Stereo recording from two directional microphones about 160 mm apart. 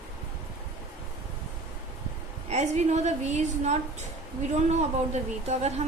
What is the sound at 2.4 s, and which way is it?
A woman's voice, 45° right (ahead or behind).